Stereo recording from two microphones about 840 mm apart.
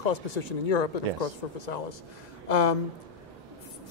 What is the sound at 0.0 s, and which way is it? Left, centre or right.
Speech, left.